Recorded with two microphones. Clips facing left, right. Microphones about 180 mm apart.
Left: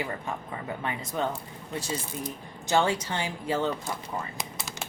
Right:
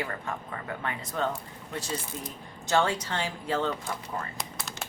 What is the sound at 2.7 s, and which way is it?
Speech, 15° left (ahead or behind).